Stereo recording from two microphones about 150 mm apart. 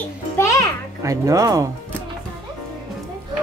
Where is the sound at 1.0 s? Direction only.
20° right (ahead or behind).